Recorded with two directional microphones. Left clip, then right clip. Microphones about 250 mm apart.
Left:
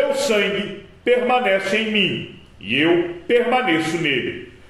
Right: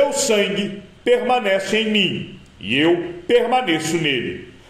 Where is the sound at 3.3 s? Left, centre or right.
Right.